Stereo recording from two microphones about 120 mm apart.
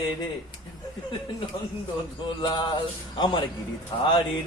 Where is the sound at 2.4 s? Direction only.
40° left (ahead or behind).